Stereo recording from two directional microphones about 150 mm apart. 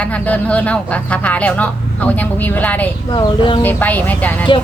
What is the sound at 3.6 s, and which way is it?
Speech, 10° left (ahead or behind).